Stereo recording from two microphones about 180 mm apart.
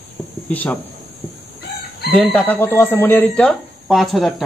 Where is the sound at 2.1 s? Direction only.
5° left (ahead or behind).